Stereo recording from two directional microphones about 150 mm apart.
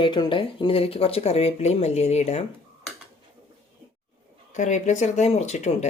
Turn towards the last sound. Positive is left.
turn(degrees=50)  # may be behind; listen again after turning